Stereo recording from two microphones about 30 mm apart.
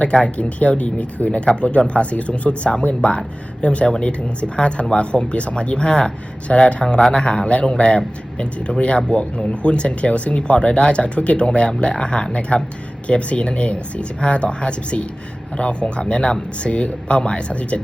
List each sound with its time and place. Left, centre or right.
0.0 s speech: left